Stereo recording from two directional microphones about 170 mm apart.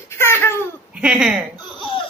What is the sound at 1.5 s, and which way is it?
Speech, 30° left (ahead or behind).